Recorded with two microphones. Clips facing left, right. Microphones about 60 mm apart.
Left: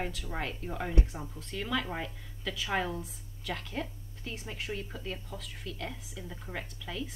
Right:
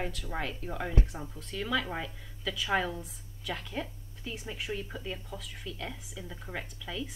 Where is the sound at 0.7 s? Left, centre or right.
Centre.